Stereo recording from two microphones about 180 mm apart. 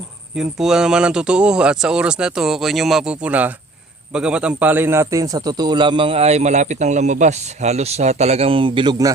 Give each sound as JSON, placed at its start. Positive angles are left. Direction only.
{"t": 0.3, "sound": "a man's voice", "side_deg": -5}